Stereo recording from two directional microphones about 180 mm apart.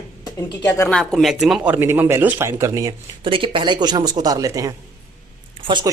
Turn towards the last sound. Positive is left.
turn(degrees=-25)  # may be behind; listen again after turning